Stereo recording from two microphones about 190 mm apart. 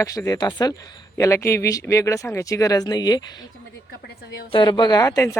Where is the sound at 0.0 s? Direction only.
15° left (ahead or behind).